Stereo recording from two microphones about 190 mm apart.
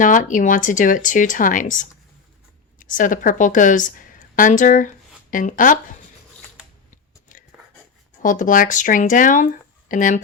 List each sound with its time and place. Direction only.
0.0 s a woman's voice: 45° left (ahead or behind)
7.3 s a sound: 45° left (ahead or behind)
8.2 s speech: 45° left (ahead or behind)